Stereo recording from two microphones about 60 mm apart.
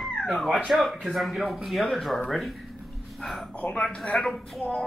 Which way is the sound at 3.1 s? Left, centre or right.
Centre.